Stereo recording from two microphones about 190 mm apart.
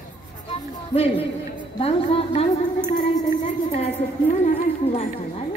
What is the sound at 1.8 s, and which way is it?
Speech, 30° left (ahead or behind).